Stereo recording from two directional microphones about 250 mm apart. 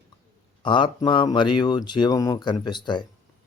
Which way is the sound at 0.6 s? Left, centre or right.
Centre.